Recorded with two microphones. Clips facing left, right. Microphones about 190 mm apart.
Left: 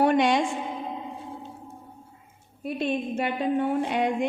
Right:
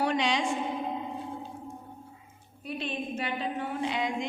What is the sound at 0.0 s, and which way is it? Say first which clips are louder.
Speech: left 7 dB; 55° left (ahead or behind).